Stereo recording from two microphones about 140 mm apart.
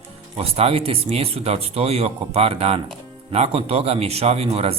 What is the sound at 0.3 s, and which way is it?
A man's voice, 45° right (ahead or behind).